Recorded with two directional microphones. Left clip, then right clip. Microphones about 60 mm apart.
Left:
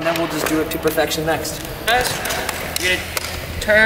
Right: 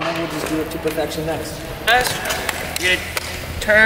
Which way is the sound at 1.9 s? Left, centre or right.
Centre.